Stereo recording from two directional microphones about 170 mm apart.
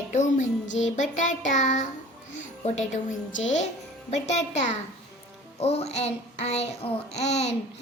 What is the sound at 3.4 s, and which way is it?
Speech, 45° left (ahead or behind).